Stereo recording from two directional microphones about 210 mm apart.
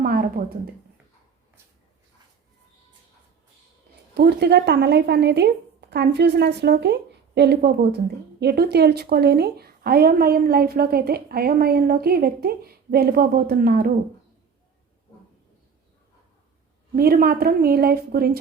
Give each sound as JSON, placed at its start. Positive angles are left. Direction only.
{"t": 0.0, "sound": "a sound", "side_deg": -45}
{"t": 4.1, "sound": "speech", "side_deg": -50}
{"t": 16.9, "sound": "speech", "side_deg": -45}